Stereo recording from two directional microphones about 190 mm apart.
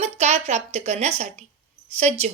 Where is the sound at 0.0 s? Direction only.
35° right (ahead or behind).